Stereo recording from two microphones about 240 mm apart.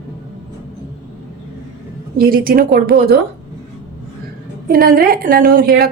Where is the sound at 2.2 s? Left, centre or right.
Right.